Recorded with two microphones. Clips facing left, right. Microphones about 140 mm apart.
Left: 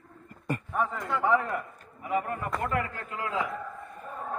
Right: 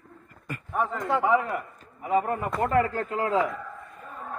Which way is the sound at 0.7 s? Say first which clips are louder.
Right 3 dB; centre (ahead or behind).